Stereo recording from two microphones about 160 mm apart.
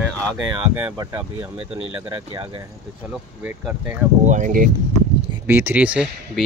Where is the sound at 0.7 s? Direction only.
10° right (ahead or behind).